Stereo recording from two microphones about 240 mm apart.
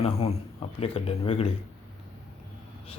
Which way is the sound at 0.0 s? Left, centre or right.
Left.